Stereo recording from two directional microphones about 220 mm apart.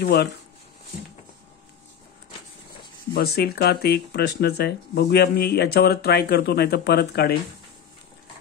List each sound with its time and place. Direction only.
0.0 s speech: 45° left (ahead or behind)
3.1 s speech: 45° left (ahead or behind)